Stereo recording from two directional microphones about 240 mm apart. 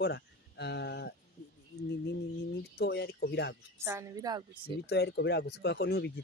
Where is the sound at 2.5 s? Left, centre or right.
Left.